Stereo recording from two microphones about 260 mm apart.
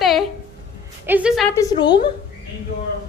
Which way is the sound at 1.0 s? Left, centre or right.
Centre.